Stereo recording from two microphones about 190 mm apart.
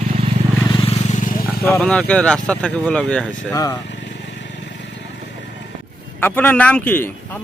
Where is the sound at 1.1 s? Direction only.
40° left (ahead or behind).